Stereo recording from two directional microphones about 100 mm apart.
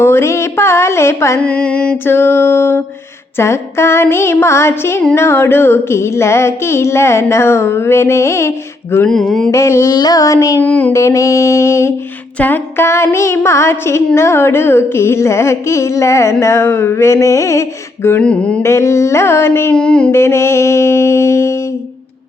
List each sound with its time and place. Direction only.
0.0 s a sound: 25° left (ahead or behind)
1.4 s music: 10° left (ahead or behind)
2.0 s carnatic music: 25° left (ahead or behind)
9.0 s mantra: 5° left (ahead or behind)
9.5 s child singing: 30° left (ahead or behind)
9.9 s child singing: 40° left (ahead or behind)
10.6 s music: 15° left (ahead or behind)
10.9 s carnatic music: 30° left (ahead or behind)
18.2 s music: 10° left (ahead or behind)
18.6 s carnatic music: 30° left (ahead or behind)
19.7 s music: 10° left (ahead or behind)
20.1 s mantra: 25° left (ahead or behind)